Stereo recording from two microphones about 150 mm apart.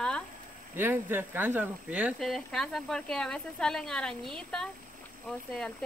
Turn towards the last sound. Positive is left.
turn(degrees=5)  # may be behind; listen again after turning